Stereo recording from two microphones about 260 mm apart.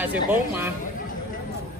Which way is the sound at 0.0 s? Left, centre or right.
Centre.